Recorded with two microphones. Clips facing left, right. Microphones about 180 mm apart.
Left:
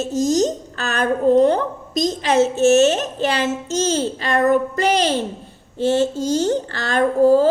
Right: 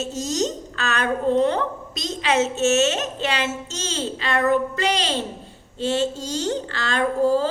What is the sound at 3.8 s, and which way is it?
A woman's voice, 45° left (ahead or behind).